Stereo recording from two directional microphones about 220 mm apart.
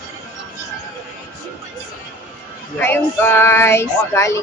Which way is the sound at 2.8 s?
10° left (ahead or behind).